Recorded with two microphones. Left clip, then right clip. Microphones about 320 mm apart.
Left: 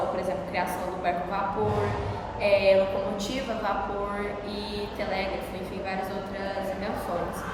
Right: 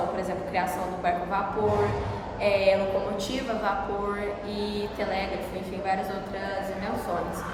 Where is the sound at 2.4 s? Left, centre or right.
Centre.